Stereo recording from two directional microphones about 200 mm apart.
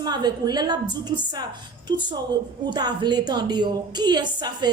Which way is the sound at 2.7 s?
20° right (ahead or behind).